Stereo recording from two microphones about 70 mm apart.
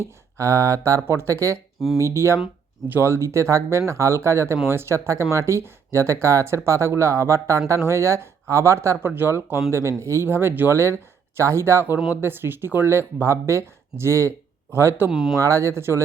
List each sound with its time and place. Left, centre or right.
0.0 s speech: right
1.0 s speech: right
9.0 s speech: right
15.1 s speech: centre
15.4 s speech: right